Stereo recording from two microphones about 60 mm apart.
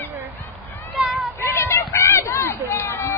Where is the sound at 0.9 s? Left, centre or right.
Centre.